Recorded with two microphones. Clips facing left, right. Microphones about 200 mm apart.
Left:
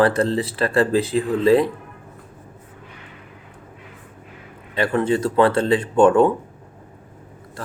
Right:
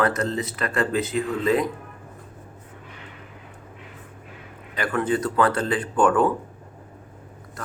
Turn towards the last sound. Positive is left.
turn(degrees=25)  # may be behind; listen again after turning